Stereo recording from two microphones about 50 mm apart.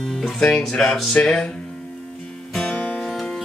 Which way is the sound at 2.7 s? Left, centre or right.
Left.